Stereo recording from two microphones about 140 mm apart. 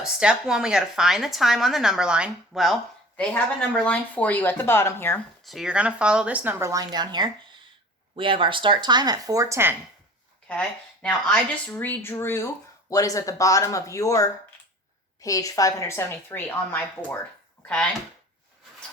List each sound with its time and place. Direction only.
0.0 s a woman's voice: 5° right (ahead or behind); by 5.2 s 15° left (ahead or behind)
5.4 s speech: centre (ahead or behind); by 9.7 s 20° right (ahead or behind)
10.5 s speech: 5° left (ahead or behind)